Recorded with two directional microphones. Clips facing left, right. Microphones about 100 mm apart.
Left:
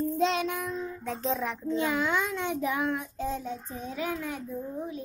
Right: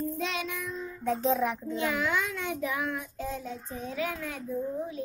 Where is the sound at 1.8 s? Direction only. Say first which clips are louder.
Left 2 dB; 20° left (ahead or behind).